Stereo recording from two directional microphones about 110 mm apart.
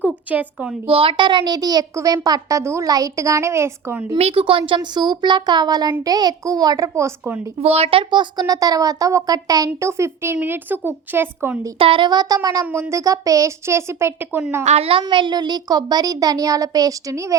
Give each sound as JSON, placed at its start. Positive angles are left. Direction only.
{"t": 0.0, "sound": "speech", "side_deg": -15}
{"t": 0.9, "sound": "a child's voice", "side_deg": -55}
{"t": 4.2, "sound": "a child's voice", "side_deg": -60}
{"t": 7.6, "sound": "a child's voice", "side_deg": -70}
{"t": 9.6, "sound": "a woman's voice", "side_deg": -25}
{"t": 11.8, "sound": "a child's voice", "side_deg": -50}
{"t": 14.6, "sound": "a woman's voice", "side_deg": -80}
{"t": 15.0, "sound": "a child's voice", "side_deg": -45}